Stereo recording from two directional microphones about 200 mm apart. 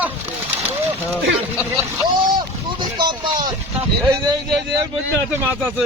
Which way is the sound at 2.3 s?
20° right (ahead or behind).